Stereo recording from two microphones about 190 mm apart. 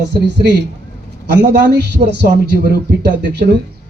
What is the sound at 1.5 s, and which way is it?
Speech, 60° right (ahead or behind).